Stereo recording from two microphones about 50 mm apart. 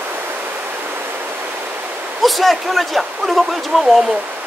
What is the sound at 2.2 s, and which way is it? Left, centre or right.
Speech, centre.